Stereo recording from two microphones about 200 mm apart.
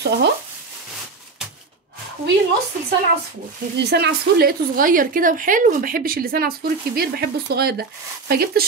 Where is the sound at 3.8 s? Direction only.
55° right (ahead or behind).